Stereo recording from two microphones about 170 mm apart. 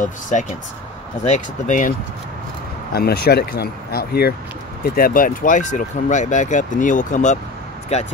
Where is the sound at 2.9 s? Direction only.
65° left (ahead or behind).